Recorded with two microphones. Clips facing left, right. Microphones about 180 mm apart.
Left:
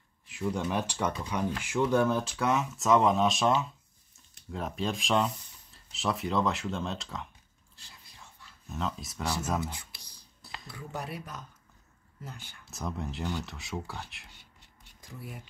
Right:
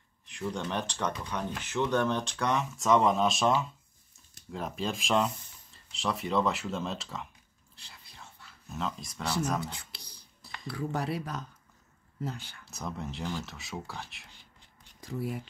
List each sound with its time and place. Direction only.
0.3 s speech: 5° left (ahead or behind)
8.6 s speech: centre (ahead or behind)
10.7 s speech: 70° right (ahead or behind)
12.6 s speech: centre (ahead or behind)
15.0 s speech: 65° right (ahead or behind)